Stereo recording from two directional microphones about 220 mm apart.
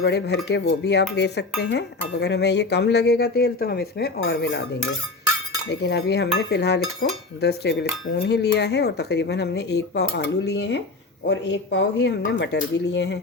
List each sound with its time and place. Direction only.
0.0 s speech: 50° left (ahead or behind)
5.6 s speech: 50° left (ahead or behind)